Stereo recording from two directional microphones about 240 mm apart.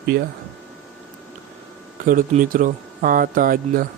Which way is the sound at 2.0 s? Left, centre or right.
Right.